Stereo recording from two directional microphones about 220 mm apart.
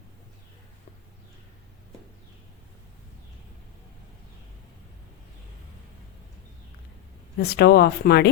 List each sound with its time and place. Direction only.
7.3 s speech: 45° left (ahead or behind)